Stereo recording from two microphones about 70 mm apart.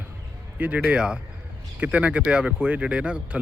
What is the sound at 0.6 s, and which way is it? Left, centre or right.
Speech, centre.